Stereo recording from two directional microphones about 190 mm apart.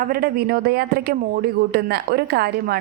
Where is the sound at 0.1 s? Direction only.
50° right (ahead or behind).